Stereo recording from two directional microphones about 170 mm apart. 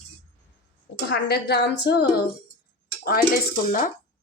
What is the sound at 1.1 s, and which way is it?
Speech, 75° left (ahead or behind).